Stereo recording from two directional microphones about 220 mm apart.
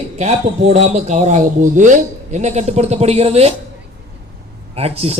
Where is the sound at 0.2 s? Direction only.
30° right (ahead or behind).